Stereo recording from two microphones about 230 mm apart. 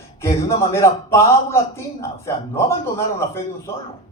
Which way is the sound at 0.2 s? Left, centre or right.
Centre.